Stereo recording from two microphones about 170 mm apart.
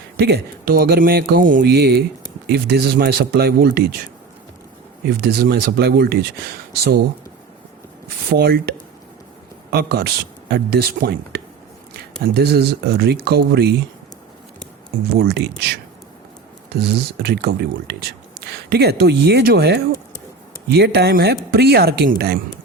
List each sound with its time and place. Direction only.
0.2 s speech: 65° right (ahead or behind)
5.0 s speech: 70° right (ahead or behind)
8.3 s speech: 65° right (ahead or behind)
15.1 s speech: 70° right (ahead or behind)